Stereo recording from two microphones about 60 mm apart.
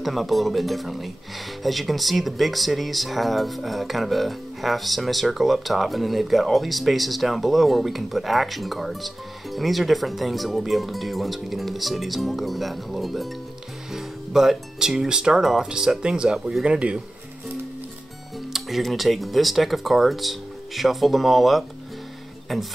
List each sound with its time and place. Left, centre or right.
0.0 s speech: centre
16.3 s speech: centre
16.6 s speech: centre
18.5 s speech: centre